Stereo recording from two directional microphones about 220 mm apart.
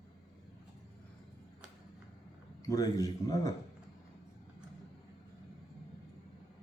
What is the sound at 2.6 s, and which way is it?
Speech, 15° left (ahead or behind).